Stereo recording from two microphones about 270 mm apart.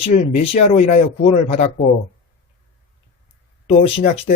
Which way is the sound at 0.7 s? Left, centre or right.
Left.